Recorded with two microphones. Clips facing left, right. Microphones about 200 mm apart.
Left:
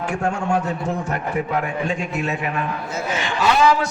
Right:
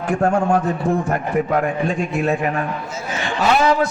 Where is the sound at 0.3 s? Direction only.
60° right (ahead or behind).